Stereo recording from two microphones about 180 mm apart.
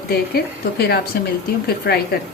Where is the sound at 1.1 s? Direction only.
60° left (ahead or behind).